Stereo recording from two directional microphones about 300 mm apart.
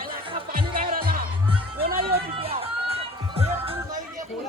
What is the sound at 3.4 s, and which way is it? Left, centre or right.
Music, centre.